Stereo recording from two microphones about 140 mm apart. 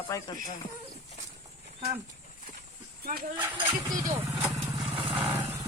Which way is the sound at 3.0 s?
90° right.